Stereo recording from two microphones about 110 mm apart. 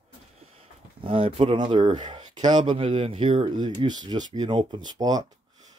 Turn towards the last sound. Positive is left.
turn(degrees=-35)  # may be behind; listen again after turning